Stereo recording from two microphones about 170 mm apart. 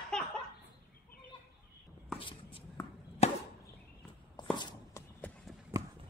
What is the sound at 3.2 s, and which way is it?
Chop, 40° left (ahead or behind).